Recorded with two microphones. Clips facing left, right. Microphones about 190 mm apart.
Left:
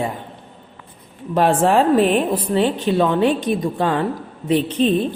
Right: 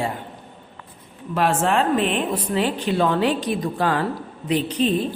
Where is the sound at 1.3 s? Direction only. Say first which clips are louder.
Left 5 dB; 35° left (ahead or behind).